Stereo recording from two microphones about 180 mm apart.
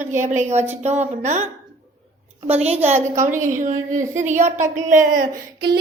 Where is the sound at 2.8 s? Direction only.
40° right (ahead or behind).